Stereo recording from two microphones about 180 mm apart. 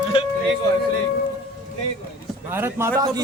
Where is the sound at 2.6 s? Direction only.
15° right (ahead or behind).